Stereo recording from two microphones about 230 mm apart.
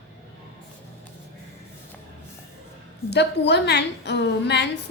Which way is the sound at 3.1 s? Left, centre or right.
Left.